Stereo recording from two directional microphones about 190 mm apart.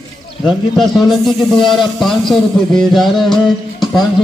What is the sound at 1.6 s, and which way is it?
Speech, 25° left (ahead or behind).